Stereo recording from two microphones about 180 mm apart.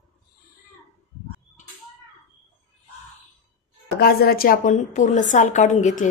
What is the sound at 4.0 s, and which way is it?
A woman's voice, 60° left (ahead or behind).